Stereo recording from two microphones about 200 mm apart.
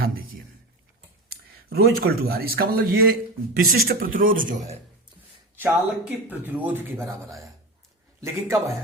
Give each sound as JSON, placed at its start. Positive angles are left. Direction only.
{"t": 1.3, "sound": "speech", "side_deg": -50}
{"t": 5.5, "sound": "a man's voice", "side_deg": -10}